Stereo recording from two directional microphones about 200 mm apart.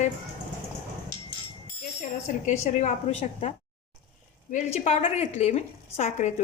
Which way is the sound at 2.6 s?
35° left (ahead or behind).